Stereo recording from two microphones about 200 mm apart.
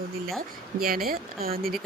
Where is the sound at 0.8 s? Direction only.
45° right (ahead or behind).